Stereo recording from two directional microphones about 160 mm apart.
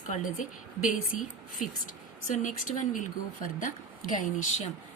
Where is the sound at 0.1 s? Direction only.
55° left (ahead or behind).